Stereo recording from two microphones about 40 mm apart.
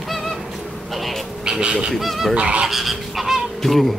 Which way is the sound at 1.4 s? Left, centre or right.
Right.